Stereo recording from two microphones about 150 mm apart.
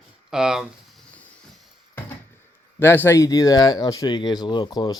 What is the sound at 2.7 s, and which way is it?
Speech, 15° left (ahead or behind).